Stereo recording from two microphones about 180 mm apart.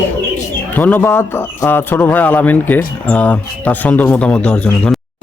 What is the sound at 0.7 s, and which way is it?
A man's voice, 10° left (ahead or behind).